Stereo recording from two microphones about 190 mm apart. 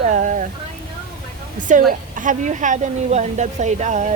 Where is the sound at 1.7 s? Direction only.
45° right (ahead or behind).